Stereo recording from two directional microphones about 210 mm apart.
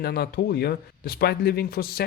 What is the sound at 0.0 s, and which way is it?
Speech, 45° left (ahead or behind).